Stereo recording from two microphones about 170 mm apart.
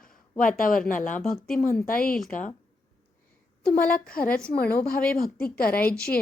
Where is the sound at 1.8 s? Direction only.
60° left (ahead or behind).